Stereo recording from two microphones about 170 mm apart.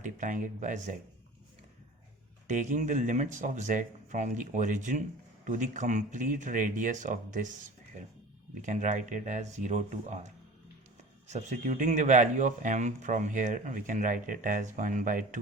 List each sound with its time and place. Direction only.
0.0 s speech: 50° right (ahead or behind)
2.5 s speech: 45° right (ahead or behind)
11.3 s speech: 45° right (ahead or behind)